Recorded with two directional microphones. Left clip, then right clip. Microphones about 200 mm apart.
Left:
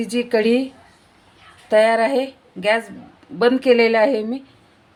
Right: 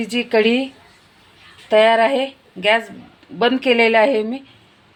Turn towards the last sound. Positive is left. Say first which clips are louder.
# right 2 dB
turn(degrees=0)  # may be behind; listen again after turning